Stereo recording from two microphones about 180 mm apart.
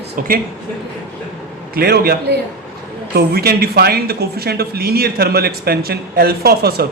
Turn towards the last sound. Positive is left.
turn(degrees=-60)  # may be behind; listen again after turning